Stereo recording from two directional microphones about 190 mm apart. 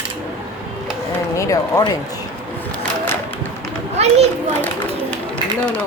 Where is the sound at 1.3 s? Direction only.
15° left (ahead or behind).